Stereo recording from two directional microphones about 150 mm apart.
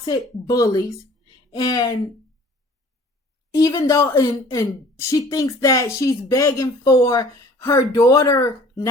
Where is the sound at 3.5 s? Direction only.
20° left (ahead or behind).